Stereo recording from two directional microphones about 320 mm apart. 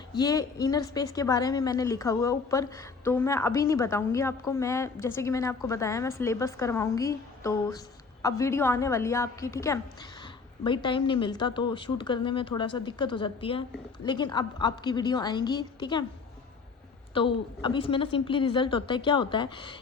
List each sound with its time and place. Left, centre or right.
0.1 s a woman's voice: centre
17.2 s a woman's voice: centre